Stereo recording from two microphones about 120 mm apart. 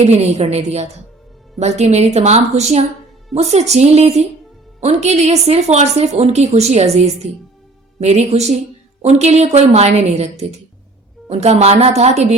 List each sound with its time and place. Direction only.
0.0 s a woman's voice: 60° right (ahead or behind)